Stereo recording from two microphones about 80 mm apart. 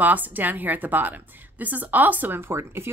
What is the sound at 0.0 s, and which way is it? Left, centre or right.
Speech, right.